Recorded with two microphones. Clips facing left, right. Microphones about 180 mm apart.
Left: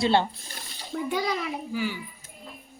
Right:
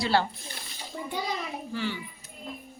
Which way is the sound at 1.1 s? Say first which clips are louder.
Left 4 dB; 90° left.